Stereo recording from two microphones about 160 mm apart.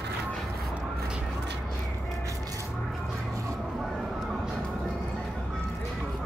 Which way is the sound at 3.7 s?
5° right (ahead or behind).